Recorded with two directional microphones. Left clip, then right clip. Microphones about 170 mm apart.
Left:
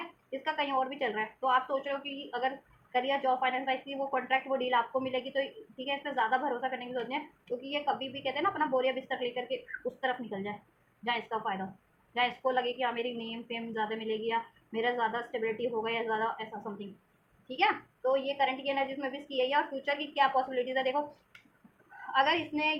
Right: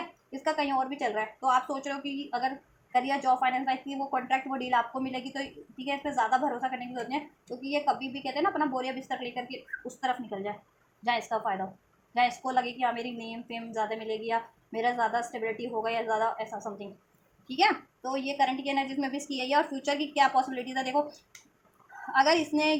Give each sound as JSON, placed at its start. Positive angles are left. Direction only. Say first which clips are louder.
{"t": 0.3, "sound": "a woman's voice", "louder": "right 3 dB", "side_deg": -30}
{"t": 22.1, "sound": "a woman's voice", "louder": "right 4 dB", "side_deg": -30}